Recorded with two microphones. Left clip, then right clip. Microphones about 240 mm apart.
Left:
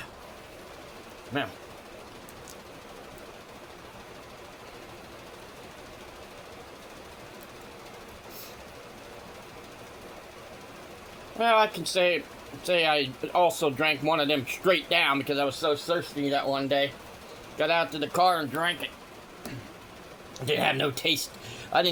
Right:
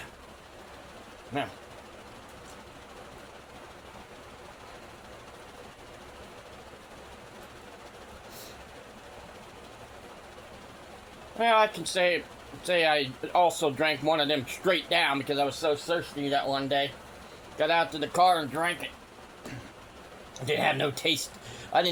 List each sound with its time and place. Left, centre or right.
11.3 s speech: left
20.4 s speech: left